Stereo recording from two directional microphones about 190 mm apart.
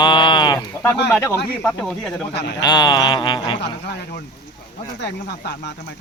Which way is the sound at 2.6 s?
20° left (ahead or behind).